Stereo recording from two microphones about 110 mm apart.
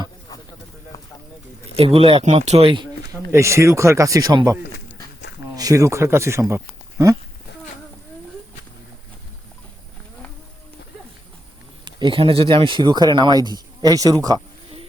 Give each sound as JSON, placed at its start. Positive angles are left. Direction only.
{"t": 1.7, "sound": "speech", "side_deg": -60}
{"t": 3.1, "sound": "speech", "side_deg": -25}
{"t": 5.5, "sound": "speech", "side_deg": -30}
{"t": 11.9, "sound": "speech", "side_deg": -45}